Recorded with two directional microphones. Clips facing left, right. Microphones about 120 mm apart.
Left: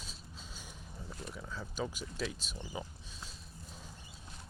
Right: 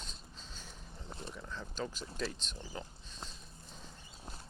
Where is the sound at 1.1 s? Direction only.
25° right (ahead or behind).